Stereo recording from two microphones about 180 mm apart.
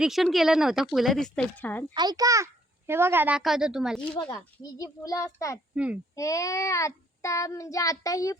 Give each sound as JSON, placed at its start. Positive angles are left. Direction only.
{"t": 0.0, "sound": "speech", "side_deg": 0}
{"t": 1.9, "sound": "a child's voice", "side_deg": -25}
{"t": 4.1, "sound": "a child's voice", "side_deg": 20}
{"t": 5.7, "sound": "speech", "side_deg": -5}
{"t": 6.1, "sound": "child singing", "side_deg": 20}